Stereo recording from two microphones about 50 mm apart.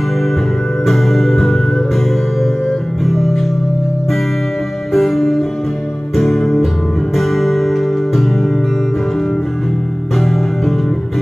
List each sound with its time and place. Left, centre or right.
0.8 s music: centre
3.0 s organ: centre
4.9 s music: centre
10.1 s music: centre